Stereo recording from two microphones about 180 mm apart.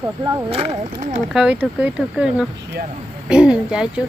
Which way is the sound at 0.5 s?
35° right (ahead or behind).